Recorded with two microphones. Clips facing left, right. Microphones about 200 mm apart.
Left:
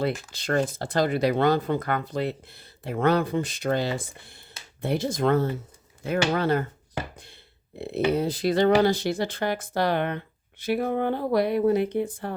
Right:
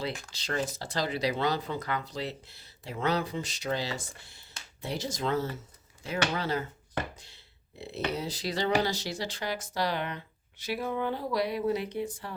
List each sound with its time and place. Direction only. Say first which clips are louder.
0.3 s speech: left 7 dB; 55° left (ahead or behind)
7.8 s speech: left 9 dB; 55° left (ahead or behind)